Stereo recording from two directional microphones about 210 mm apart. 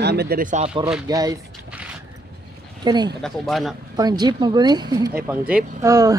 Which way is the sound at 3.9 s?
20° right (ahead or behind).